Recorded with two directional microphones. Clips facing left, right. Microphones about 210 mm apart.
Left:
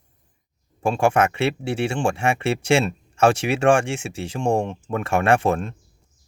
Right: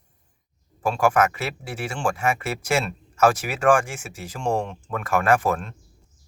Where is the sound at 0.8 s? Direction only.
25° left (ahead or behind).